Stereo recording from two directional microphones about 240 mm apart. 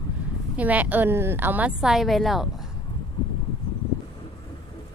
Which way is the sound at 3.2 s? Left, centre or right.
Centre.